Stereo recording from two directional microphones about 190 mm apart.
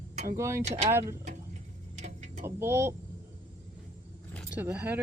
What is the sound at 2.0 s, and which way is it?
Vehicle, 40° right (ahead or behind).